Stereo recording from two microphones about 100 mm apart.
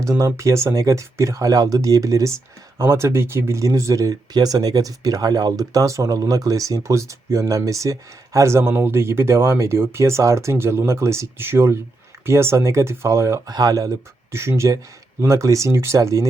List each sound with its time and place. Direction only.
0.0 s speech: 30° right (ahead or behind)